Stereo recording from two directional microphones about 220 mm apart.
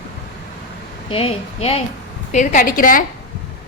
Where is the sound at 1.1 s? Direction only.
25° left (ahead or behind).